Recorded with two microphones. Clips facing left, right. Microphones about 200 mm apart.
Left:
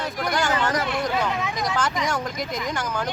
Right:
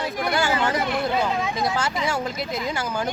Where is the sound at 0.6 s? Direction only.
25° right (ahead or behind).